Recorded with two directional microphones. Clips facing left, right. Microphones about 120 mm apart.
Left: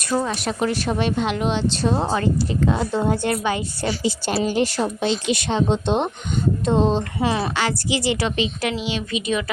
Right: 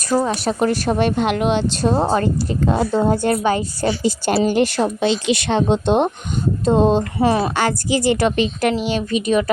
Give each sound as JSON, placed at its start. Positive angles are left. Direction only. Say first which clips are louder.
{"t": 0.1, "sound": "a woman's voice", "louder": "right 4 dB", "side_deg": -50}